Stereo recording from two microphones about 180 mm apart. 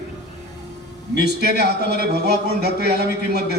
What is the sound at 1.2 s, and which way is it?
A man's voice, 65° right (ahead or behind).